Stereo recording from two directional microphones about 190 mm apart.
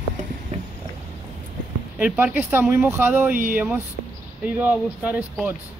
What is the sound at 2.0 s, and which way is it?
Speech, 5° right (ahead or behind).